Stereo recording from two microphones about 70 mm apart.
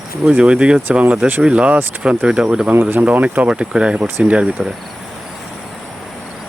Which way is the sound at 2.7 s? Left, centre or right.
Right.